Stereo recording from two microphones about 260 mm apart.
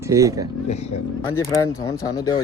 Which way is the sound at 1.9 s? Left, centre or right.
Centre.